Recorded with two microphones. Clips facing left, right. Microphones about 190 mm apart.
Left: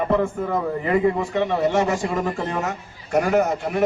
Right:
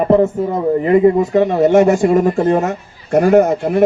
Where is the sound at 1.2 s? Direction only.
40° right (ahead or behind).